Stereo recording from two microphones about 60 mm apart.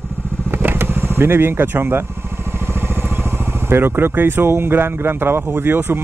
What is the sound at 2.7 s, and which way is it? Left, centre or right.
Speech, right.